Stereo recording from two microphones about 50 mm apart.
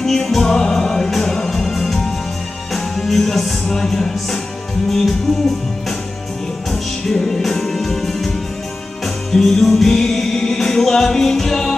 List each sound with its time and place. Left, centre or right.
0.0 s music: centre
6.7 s music: centre